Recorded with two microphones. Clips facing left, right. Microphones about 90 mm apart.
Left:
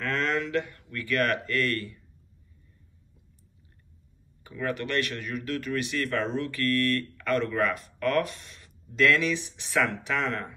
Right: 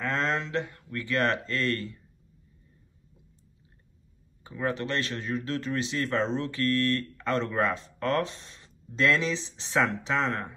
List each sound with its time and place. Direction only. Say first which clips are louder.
0.0 s speech: even; 25° right (ahead or behind)
4.5 s speech: right 1 dB; 25° right (ahead or behind)